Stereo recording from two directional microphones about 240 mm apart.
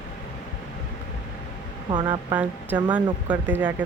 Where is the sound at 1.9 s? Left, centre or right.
Centre.